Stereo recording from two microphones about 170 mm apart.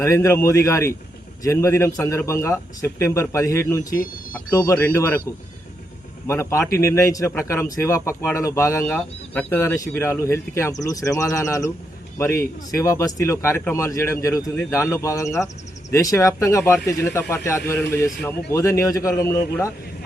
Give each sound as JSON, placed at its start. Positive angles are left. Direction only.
{"t": 0.0, "sound": "speech", "side_deg": 15}
{"t": 6.2, "sound": "a man's voice", "side_deg": 15}